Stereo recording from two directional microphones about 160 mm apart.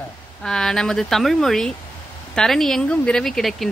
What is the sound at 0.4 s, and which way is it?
Speech, 5° left (ahead or behind).